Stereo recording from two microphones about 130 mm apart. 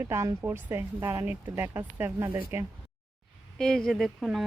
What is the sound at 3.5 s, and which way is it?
Speech, 5° left (ahead or behind).